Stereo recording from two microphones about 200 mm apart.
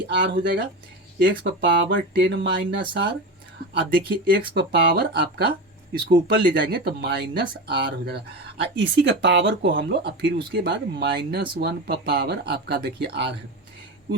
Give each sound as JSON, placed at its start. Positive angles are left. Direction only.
{"t": 0.1, "sound": "speech", "side_deg": -60}
{"t": 4.3, "sound": "speech", "side_deg": -60}